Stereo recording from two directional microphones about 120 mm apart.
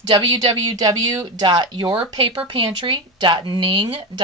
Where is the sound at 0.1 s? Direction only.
40° right (ahead or behind).